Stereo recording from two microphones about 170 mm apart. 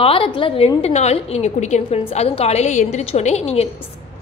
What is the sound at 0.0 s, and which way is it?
A woman's voice, 30° left (ahead or behind).